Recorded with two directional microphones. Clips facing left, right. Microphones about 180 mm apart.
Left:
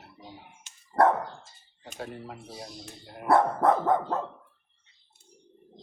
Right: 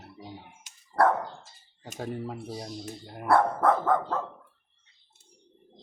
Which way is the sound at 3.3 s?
20° left (ahead or behind).